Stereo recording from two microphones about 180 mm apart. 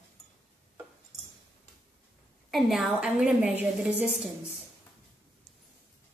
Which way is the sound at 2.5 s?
Centre (ahead or behind).